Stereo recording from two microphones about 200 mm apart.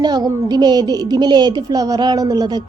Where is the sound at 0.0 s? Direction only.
20° right (ahead or behind).